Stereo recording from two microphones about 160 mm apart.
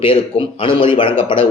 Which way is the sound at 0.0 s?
35° left (ahead or behind).